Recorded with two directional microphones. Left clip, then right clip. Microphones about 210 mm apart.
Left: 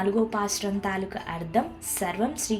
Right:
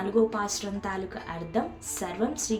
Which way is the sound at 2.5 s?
5° left (ahead or behind).